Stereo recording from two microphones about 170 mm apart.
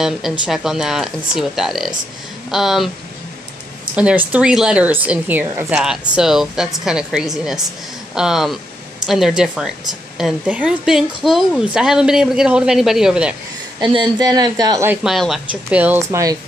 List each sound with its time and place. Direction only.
0.0 s speech: centre (ahead or behind)
3.9 s speech: 10° right (ahead or behind)
13.7 s speech: 30° right (ahead or behind)
15.0 s speech: centre (ahead or behind); by 16.3 s 15° right (ahead or behind)